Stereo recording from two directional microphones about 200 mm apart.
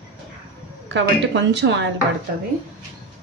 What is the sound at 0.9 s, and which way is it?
Speech, 65° right (ahead or behind).